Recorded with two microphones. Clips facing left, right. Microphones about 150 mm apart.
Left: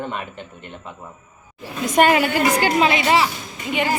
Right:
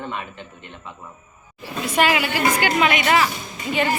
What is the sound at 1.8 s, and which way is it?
Speech, 45° left (ahead or behind).